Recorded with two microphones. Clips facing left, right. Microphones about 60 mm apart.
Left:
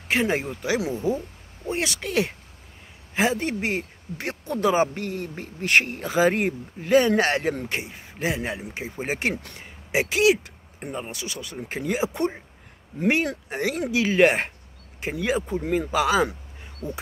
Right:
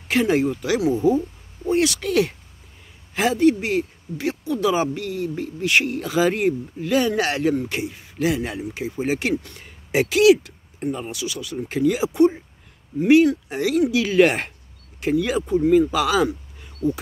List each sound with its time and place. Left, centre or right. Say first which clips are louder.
0.1 s speech: right 5 dB; left
9.6 s speech: right 3 dB; left